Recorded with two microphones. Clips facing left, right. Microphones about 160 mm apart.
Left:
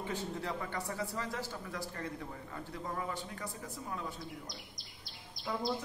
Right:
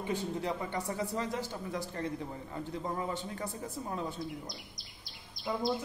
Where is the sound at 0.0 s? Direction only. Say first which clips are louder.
Right 4 dB; 15° right (ahead or behind).